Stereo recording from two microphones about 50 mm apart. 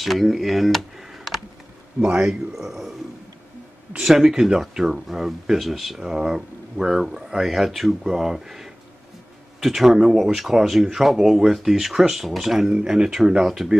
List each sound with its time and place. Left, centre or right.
0.0 s speech: centre
2.0 s speech: centre
2.5 s speech: centre
4.0 s speech: centre
12.7 s speech: centre